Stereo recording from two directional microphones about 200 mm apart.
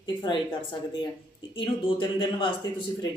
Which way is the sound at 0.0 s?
25° left (ahead or behind).